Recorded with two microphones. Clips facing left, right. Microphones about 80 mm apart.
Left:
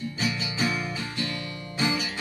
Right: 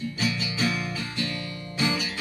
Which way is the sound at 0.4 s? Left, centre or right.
Left.